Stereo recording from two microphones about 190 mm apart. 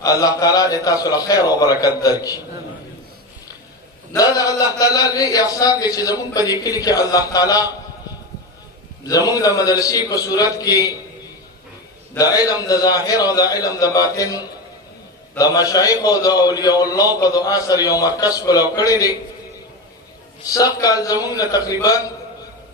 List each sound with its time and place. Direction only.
0.0 s a man's voice: 20° left (ahead or behind)
4.2 s a man's voice: 20° left (ahead or behind)
9.0 s a man's voice: 20° left (ahead or behind)
12.1 s a man's voice: 20° left (ahead or behind)
20.5 s a man's voice: 20° left (ahead or behind)